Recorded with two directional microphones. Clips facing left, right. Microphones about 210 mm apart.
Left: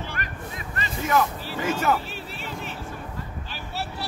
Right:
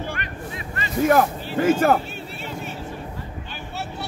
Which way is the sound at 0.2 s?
40° left (ahead or behind).